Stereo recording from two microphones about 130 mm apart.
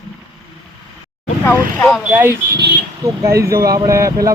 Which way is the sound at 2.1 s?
15° right (ahead or behind).